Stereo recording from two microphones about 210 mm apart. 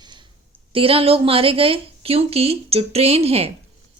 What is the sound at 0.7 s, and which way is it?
Speech, 25° right (ahead or behind).